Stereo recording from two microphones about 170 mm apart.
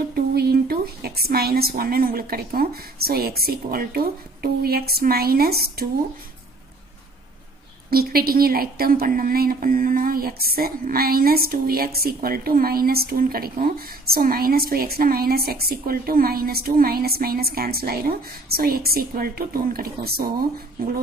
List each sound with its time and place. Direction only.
0.1 s a woman's voice: 65° right (ahead or behind)
7.9 s a woman's voice: 65° right (ahead or behind)